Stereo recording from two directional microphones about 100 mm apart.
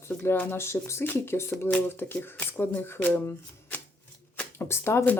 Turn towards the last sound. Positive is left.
turn(degrees=25)  # may be behind; listen again after turning